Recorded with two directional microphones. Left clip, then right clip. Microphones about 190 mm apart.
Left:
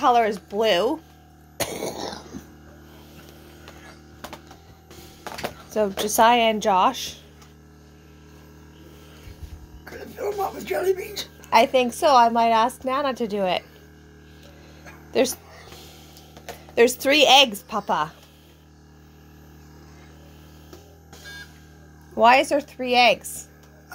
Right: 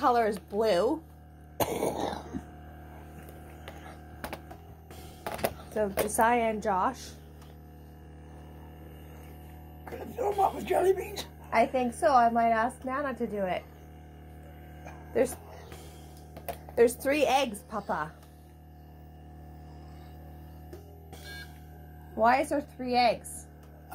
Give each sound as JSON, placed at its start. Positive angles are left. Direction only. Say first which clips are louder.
{"t": 0.0, "sound": "speech", "louder": "left 7 dB", "side_deg": 20}
{"t": 5.8, "sound": "a woman's voice", "louder": "left 8 dB", "side_deg": 50}
{"t": 6.4, "sound": "a woman's voice", "louder": "left 9 dB", "side_deg": 30}
{"t": 10.1, "sound": "speech", "louder": "even", "side_deg": 10}
{"t": 11.5, "sound": "a woman's voice", "louder": "left 9 dB", "side_deg": 70}
{"t": 17.0, "sound": "speech", "louder": "left 9 dB", "side_deg": 60}
{"t": 17.3, "sound": "a woman's voice", "louder": "left 12 dB", "side_deg": 30}
{"t": 22.2, "sound": "speech", "louder": "left 9 dB", "side_deg": 60}
{"t": 22.5, "sound": "a woman's voice", "louder": "left 8 dB", "side_deg": 40}